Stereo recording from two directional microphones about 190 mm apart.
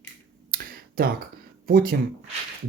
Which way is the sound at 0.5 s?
50° right (ahead or behind).